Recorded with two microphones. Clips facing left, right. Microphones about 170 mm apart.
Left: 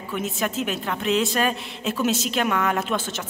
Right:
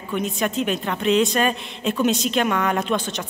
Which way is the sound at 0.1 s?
5° left (ahead or behind).